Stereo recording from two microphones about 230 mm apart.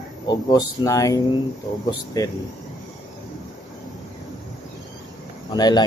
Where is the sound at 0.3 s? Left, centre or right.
Centre.